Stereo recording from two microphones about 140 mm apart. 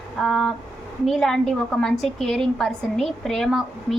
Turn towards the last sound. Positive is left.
turn(degrees=0)  # may be behind; listen again after turning